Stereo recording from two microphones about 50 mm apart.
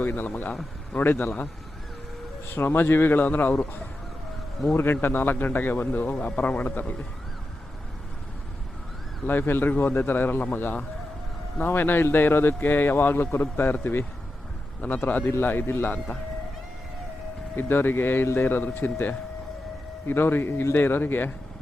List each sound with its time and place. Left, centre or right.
0.0 s a man's voice: left
2.5 s a man's voice: left
9.2 s a man's voice: left
17.6 s a man's voice: left